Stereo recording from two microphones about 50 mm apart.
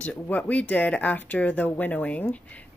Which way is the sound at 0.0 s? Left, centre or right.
Left.